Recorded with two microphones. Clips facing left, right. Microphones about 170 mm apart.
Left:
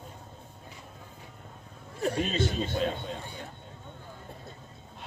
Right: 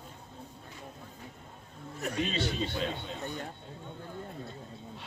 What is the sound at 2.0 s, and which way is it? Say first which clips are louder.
Speech: left 5 dB; 30° left (ahead or behind).